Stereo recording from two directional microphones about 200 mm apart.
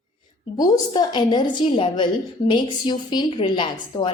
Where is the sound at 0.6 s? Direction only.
20° left (ahead or behind).